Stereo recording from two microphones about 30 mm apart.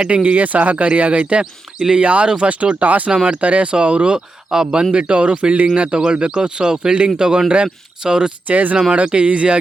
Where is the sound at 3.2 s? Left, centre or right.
Right.